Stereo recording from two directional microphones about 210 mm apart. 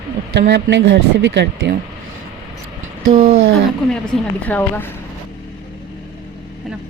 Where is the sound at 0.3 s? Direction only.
55° right (ahead or behind).